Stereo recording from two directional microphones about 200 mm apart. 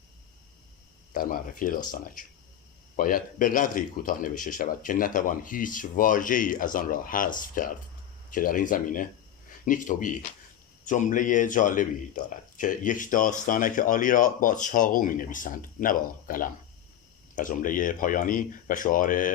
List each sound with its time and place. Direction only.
1.1 s speech: 45° left (ahead or behind)
2.9 s speech: 45° left (ahead or behind)